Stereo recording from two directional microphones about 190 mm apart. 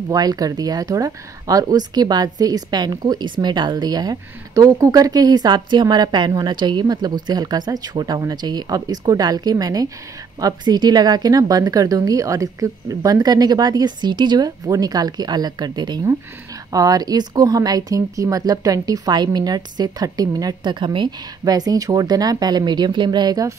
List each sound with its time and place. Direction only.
0.1 s speech: 20° right (ahead or behind)